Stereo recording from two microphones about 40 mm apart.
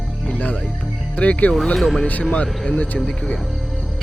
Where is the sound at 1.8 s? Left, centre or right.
Centre.